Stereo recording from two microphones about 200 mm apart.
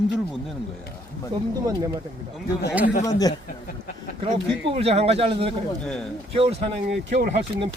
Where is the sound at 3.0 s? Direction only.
20° left (ahead or behind).